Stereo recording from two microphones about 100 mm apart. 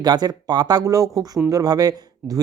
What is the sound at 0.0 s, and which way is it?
Speech, 45° right (ahead or behind).